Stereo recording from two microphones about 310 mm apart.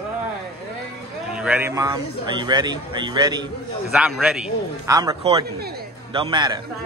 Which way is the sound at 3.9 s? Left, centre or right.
Centre.